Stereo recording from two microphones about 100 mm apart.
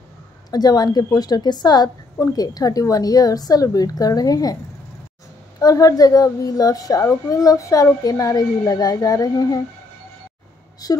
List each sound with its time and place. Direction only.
0.5 s a child's voice: 40° left (ahead or behind)
5.6 s a child's voice: 35° left (ahead or behind)
10.8 s a child's voice: 40° left (ahead or behind)